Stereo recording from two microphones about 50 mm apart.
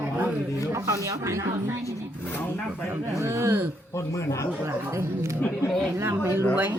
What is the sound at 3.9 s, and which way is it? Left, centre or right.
Speech, left.